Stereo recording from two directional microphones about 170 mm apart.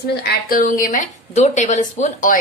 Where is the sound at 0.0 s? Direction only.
70° left (ahead or behind).